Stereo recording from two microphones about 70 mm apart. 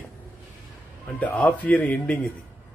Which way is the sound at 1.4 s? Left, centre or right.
Left.